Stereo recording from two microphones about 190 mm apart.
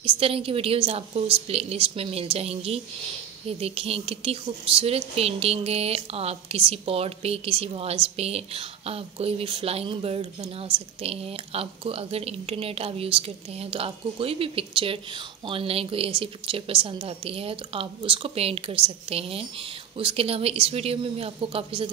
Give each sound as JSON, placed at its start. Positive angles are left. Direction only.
{"t": 0.0, "sound": "speech", "side_deg": -30}